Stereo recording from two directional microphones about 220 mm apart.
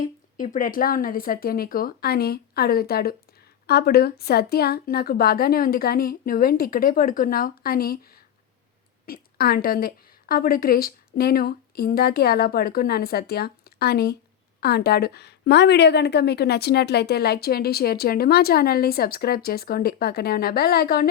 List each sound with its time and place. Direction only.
0.3 s a woman's voice: 35° left (ahead or behind)